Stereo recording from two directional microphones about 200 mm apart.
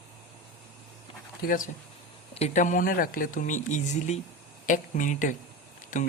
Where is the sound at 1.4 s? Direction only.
45° left (ahead or behind).